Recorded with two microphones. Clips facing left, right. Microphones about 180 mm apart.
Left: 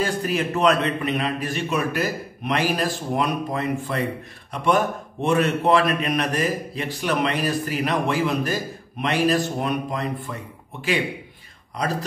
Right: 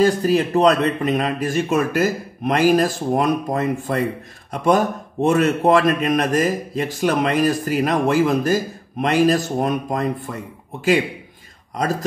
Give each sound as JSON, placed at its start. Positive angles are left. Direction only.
{"t": 0.0, "sound": "a man's voice", "side_deg": -35}